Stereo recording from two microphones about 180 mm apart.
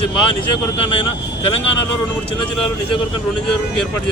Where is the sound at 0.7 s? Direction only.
30° left (ahead or behind).